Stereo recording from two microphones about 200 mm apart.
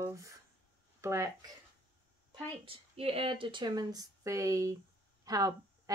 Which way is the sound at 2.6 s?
30° right (ahead or behind).